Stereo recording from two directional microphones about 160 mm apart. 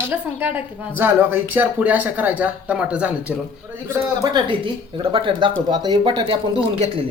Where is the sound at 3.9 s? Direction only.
25° right (ahead or behind).